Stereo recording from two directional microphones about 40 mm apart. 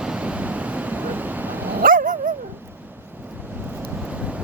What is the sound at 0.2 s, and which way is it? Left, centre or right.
Dog, right.